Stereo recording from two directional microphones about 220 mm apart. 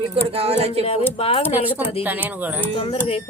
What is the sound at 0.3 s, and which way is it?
Speech, 25° right (ahead or behind).